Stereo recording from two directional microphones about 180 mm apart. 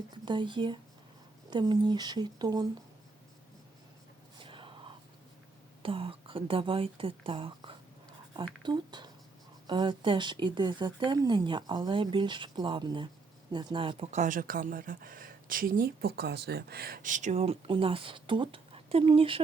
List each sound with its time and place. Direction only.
0.3 s speech: 25° right (ahead or behind)
4.4 s a sound: 30° right (ahead or behind)
5.8 s speech: 30° right (ahead or behind)